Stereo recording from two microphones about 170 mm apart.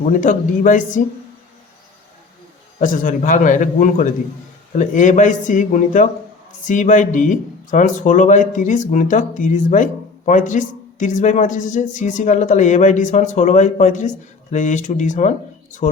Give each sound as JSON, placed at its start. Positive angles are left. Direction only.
{"t": 0.0, "sound": "speech", "side_deg": 50}
{"t": 2.8, "sound": "speech", "side_deg": 50}